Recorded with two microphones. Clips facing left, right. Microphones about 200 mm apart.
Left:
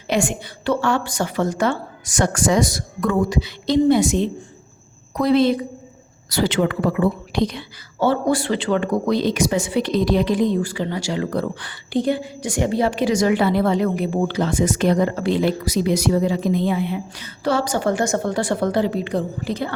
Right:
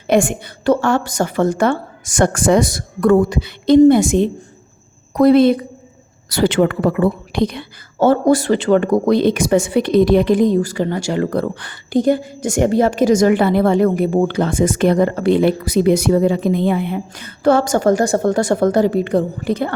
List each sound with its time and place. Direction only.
0.1 s a woman's voice: 50° right (ahead or behind)